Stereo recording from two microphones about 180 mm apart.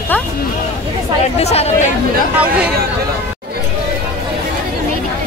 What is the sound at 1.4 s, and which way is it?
Speech, 35° left (ahead or behind).